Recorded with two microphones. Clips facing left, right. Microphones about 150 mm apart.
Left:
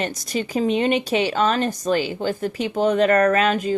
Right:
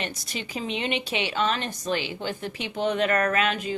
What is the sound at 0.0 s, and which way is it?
Speech, 40° left (ahead or behind).